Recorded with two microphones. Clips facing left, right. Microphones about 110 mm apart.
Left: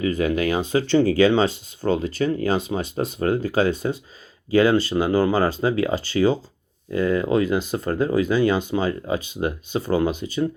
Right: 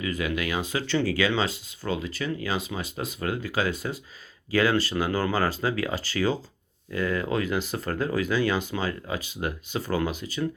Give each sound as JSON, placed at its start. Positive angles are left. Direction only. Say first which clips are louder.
{"t": 0.0, "sound": "speech", "louder": "left 7 dB", "side_deg": 35}